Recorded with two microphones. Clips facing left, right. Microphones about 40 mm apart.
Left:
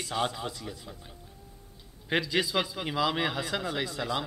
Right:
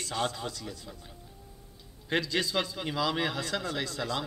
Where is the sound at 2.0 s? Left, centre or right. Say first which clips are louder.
Left 2 dB; centre.